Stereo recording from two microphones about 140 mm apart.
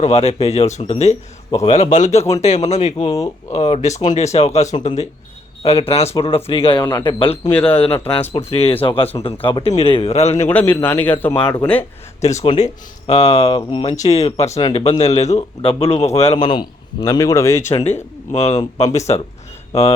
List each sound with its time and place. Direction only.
0.0 s a man's voice: 50° left (ahead or behind)
3.0 s a man's voice: 25° left (ahead or behind)
3.5 s a man's voice: 50° left (ahead or behind)
7.5 s a man's voice: 10° left (ahead or behind)
8.3 s a man's voice: 50° left (ahead or behind)
10.5 s a man's voice: 10° left (ahead or behind)
12.2 s a man's voice: 50° left (ahead or behind)
13.6 s a man's voice: 40° left (ahead or behind)
13.9 s a man's voice: 50° left (ahead or behind)
16.4 s a man's voice: 35° left (ahead or behind)
18.3 s a man's voice: 50° left (ahead or behind)